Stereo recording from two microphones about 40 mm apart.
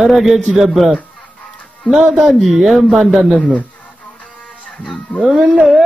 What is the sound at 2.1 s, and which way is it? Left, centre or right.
A man's voice, centre.